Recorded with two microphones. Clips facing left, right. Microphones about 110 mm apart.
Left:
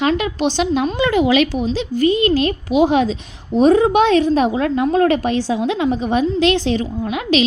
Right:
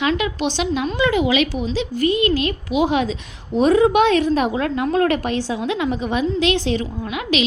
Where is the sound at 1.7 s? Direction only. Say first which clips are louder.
Left 3 dB; 25° left (ahead or behind).